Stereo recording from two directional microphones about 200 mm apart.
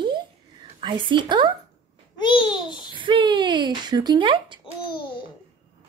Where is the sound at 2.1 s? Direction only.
25° left (ahead or behind).